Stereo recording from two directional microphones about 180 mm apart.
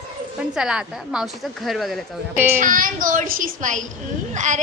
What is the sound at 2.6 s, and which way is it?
A woman's voice, 50° right (ahead or behind).